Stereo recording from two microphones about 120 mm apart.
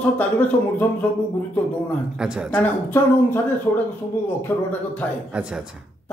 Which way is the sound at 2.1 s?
5° right (ahead or behind).